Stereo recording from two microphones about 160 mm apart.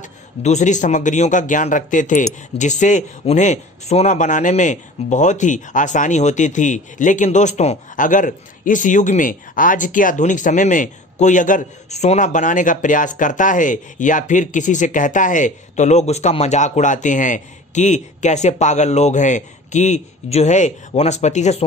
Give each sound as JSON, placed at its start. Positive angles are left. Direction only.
{"t": 0.0, "sound": "a man's voice", "side_deg": 45}